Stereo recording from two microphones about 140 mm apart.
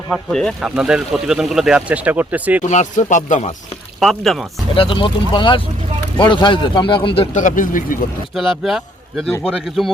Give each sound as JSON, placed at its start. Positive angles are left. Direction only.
{"t": 0.1, "sound": "speech", "side_deg": 5}
{"t": 2.6, "sound": "speech", "side_deg": 55}
{"t": 4.0, "sound": "speech", "side_deg": 0}
{"t": 4.7, "sound": "speech", "side_deg": 40}
{"t": 7.3, "sound": "speech", "side_deg": 70}
{"t": 8.3, "sound": "speech", "side_deg": 0}